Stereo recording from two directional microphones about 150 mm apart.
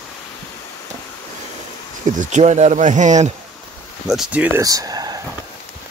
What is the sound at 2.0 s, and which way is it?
Speech, 55° right (ahead or behind).